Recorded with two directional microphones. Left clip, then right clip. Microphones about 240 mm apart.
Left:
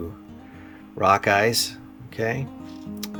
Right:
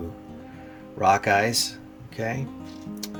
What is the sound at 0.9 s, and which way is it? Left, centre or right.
Speech, centre.